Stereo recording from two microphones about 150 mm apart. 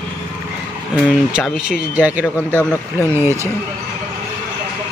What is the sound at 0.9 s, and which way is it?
Speech, 5° right (ahead or behind).